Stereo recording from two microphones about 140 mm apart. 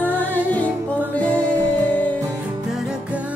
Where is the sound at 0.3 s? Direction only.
10° left (ahead or behind).